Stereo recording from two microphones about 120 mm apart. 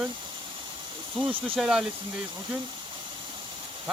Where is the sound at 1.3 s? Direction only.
45° right (ahead or behind).